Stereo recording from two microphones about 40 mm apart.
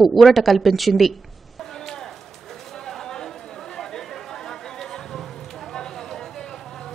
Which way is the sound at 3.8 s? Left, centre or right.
Centre.